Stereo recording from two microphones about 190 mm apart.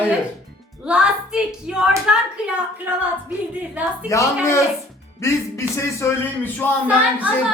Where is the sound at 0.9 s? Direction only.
5° right (ahead or behind).